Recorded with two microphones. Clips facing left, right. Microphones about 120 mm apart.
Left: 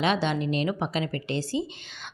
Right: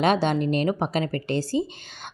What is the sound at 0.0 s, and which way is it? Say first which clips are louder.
A woman's voice: right 4 dB; 45° right (ahead or behind).